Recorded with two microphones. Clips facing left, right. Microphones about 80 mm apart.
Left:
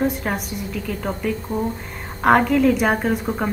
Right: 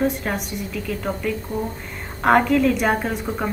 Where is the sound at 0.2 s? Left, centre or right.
Centre.